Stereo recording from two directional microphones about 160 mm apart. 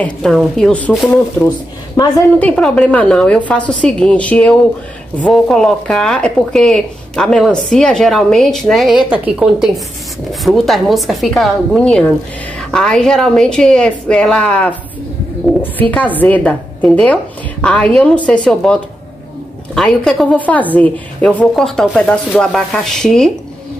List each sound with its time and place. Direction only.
0.0 s speech: 5° left (ahead or behind)
1.4 s a woman's voice: 20° left (ahead or behind)
2.3 s a woman's voice: 10° left (ahead or behind)